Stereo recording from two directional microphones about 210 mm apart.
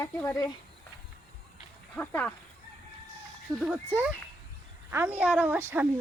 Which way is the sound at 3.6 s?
5° right (ahead or behind).